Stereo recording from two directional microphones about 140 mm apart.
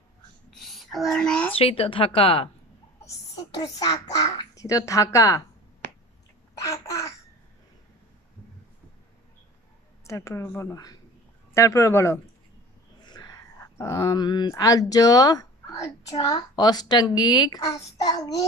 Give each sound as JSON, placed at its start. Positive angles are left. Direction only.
{"t": 0.6, "sound": "a sound", "side_deg": 0}
{"t": 1.6, "sound": "speech", "side_deg": 40}
{"t": 3.6, "sound": "a woman's voice", "side_deg": 25}
{"t": 6.6, "sound": "babbling", "side_deg": 25}
{"t": 10.0, "sound": "a woman's voice", "side_deg": 20}